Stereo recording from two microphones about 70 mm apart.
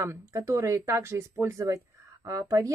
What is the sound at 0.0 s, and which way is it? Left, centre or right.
Speech, right.